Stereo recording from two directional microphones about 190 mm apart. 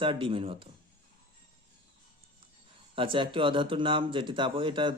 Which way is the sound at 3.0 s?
25° right (ahead or behind).